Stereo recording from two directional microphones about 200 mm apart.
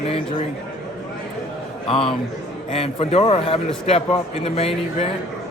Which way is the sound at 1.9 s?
25° left (ahead or behind).